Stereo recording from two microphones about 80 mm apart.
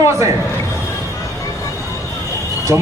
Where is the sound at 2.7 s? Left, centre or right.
Right.